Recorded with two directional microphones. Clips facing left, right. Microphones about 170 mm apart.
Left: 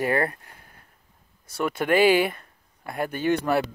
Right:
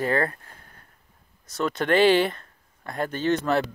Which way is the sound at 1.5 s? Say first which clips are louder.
Even; 10° left (ahead or behind).